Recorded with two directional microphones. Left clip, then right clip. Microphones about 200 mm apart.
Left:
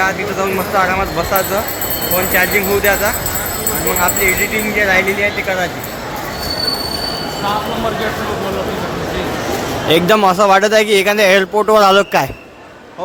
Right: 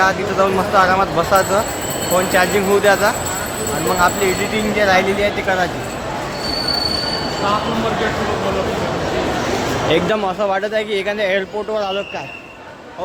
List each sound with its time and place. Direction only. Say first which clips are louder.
0.8 s speech: right 1 dB; 10° right (ahead or behind)
4.8 s speech: left 1 dB; 10° right (ahead or behind)
9.9 s speech: left 8 dB; 25° left (ahead or behind)